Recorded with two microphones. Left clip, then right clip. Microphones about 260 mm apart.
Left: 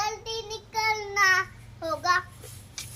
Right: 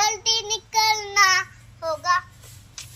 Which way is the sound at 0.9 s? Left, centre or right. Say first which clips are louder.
Right 4 dB; right.